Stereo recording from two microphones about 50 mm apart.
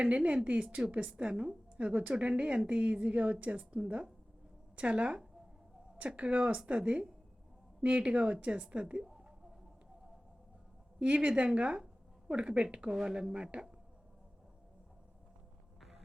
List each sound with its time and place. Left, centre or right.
0.0 s a woman's voice: right
11.0 s a woman's voice: right
15.8 s music: centre